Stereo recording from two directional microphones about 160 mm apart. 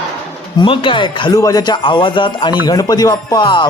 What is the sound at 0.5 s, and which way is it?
Speech, 30° left (ahead or behind).